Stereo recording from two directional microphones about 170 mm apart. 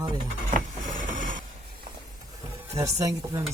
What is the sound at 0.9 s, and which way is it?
Mechanisms, 50° right (ahead or behind).